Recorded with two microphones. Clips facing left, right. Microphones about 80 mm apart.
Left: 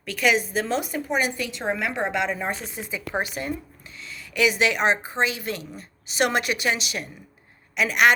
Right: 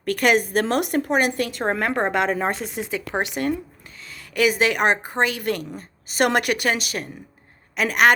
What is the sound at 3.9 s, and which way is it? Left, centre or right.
A woman's voice, right.